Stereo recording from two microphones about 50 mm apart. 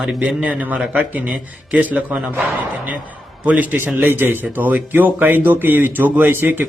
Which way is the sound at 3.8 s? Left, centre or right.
Right.